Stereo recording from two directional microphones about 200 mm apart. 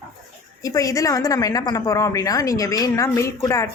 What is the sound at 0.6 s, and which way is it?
A woman's voice, 15° left (ahead or behind).